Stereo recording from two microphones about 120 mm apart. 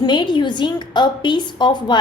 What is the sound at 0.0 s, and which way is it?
A woman's voice, 40° left (ahead or behind).